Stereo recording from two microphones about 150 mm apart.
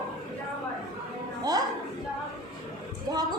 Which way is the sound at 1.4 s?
25° right (ahead or behind).